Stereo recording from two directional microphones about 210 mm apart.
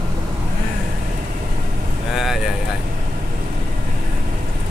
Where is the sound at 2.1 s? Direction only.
Centre (ahead or behind).